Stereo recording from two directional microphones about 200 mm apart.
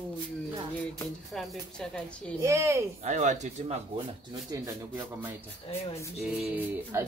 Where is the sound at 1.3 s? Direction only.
Centre (ahead or behind).